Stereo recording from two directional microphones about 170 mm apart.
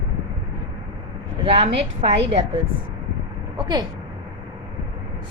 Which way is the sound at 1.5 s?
35° right (ahead or behind).